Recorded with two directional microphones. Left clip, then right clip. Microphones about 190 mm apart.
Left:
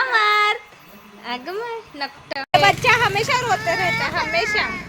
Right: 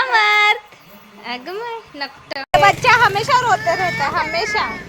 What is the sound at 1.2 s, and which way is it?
A woman's voice, 5° right (ahead or behind).